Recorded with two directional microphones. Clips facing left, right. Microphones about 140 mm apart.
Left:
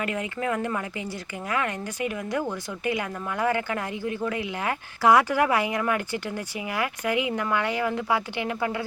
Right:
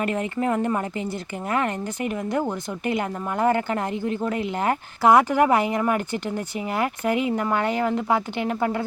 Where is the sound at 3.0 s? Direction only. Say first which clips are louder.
Right 4 dB; 35° right (ahead or behind).